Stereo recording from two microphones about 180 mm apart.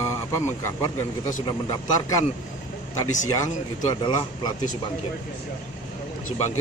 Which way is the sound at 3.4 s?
25° left (ahead or behind).